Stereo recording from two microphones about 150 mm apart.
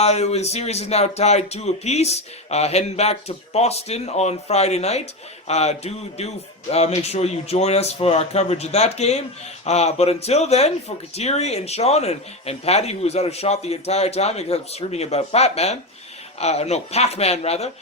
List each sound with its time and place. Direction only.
0.0 s speech: 45° left (ahead or behind)